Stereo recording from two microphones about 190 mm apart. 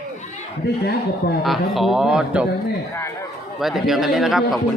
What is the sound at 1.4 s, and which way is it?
Speech, centre (ahead or behind).